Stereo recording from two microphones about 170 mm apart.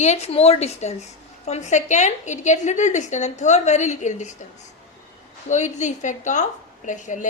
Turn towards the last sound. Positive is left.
turn(degrees=45)  # may be behind; listen again after turning